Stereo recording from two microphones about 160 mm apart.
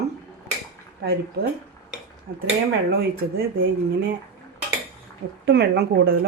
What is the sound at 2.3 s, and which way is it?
Speech, 70° right (ahead or behind).